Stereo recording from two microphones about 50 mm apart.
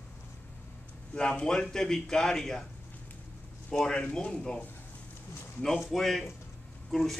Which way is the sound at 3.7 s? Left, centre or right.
Centre.